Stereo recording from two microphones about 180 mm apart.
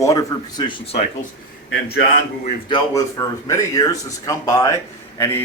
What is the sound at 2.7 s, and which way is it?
A man's voice, 20° left (ahead or behind).